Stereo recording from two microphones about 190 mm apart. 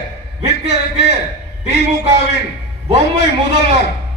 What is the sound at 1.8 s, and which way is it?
Speech, 60° left (ahead or behind).